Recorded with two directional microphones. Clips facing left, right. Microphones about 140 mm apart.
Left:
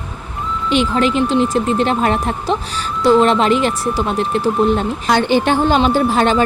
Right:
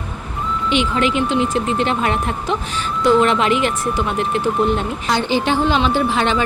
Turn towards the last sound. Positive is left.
turn(degrees=40)  # may be behind; listen again after turning